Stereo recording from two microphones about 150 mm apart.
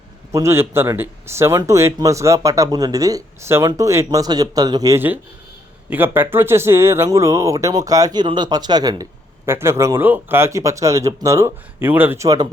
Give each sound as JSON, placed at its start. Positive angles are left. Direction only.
{"t": 0.3, "sound": "speech", "side_deg": -20}